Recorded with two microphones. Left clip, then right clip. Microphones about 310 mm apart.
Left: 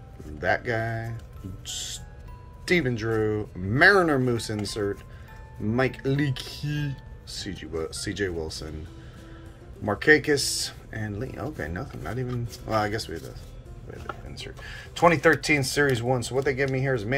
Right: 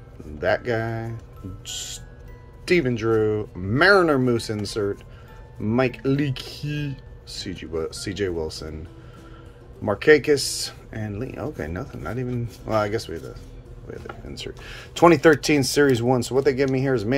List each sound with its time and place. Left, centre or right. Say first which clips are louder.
0.4 s speech: right 3 dB; centre
9.8 s speech: right 3 dB; centre
14.3 s speech: right 4 dB; right